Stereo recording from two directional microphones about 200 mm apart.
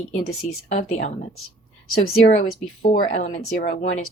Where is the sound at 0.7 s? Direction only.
35° left (ahead or behind).